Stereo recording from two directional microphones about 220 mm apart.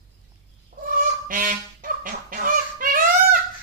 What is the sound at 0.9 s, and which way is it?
Goose, 40° right (ahead or behind).